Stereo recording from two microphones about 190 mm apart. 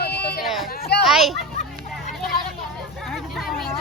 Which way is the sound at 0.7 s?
55° left (ahead or behind).